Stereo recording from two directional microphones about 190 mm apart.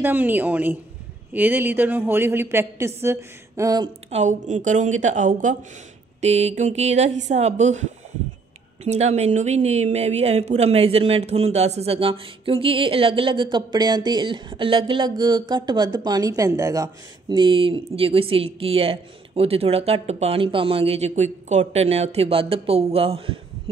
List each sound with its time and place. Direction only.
0.0 s a woman's voice: 10° right (ahead or behind)
4.1 s a woman's voice: 40° right (ahead or behind)